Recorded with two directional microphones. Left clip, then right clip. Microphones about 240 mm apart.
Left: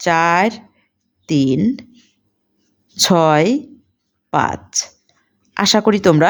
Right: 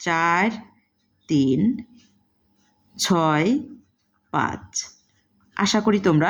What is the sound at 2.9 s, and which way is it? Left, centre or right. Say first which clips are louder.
A woman's voice: left 8 dB; left.